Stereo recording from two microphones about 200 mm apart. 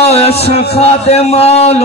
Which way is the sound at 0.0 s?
30° left (ahead or behind).